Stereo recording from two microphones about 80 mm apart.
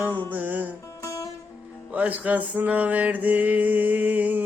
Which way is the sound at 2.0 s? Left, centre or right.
Centre.